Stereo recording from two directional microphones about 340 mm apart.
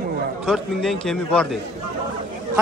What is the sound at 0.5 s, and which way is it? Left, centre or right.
A man's voice, centre.